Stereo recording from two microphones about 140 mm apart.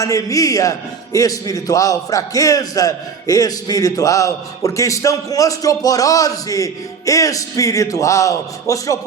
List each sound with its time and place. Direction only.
0.0 s a man's voice: 25° left (ahead or behind)